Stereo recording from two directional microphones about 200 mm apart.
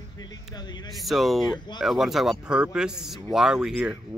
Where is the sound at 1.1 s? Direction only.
Centre (ahead or behind).